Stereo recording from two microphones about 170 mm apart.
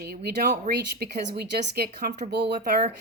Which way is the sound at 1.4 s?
65° right (ahead or behind).